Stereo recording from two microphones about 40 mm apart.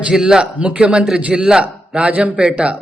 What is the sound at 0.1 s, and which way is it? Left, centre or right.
A man's voice, centre.